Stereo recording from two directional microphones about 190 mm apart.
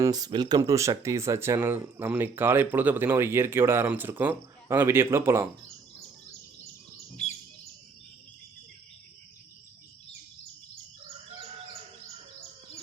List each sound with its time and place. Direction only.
0.0 s speech: 20° right (ahead or behind)
7.2 s bird: 35° left (ahead or behind)